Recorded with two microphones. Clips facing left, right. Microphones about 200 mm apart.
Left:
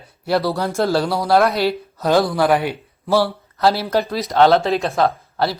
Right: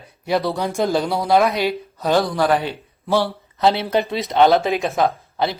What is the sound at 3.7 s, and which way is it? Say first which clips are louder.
A man's voice: even; 20° right (ahead or behind).